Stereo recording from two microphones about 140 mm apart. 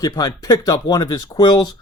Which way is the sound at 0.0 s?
25° left (ahead or behind).